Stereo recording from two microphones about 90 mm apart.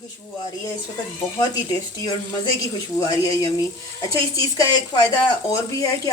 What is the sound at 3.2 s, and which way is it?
A woman's voice, 40° left (ahead or behind).